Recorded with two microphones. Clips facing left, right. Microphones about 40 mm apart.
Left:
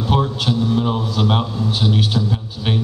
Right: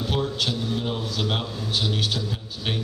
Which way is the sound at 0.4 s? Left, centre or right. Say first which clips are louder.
Left 8 dB; centre.